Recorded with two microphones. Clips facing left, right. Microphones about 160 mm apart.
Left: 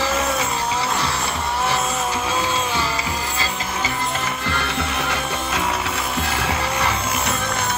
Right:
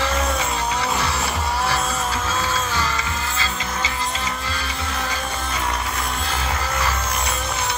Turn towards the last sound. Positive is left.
turn(degrees=70)  # may be behind; listen again after turning